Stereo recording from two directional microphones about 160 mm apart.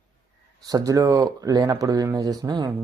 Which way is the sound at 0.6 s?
20° right (ahead or behind).